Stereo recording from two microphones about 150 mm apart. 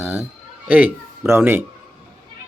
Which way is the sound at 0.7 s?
10° right (ahead or behind).